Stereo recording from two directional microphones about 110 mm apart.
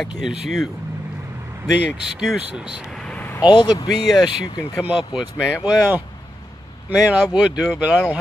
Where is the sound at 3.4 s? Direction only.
45° left (ahead or behind).